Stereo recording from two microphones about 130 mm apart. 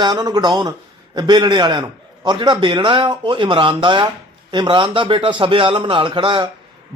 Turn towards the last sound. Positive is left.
turn(degrees=-40)  # may be behind; listen again after turning